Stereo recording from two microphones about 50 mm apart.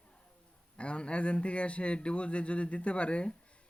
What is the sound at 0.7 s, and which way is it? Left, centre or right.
Speech, left.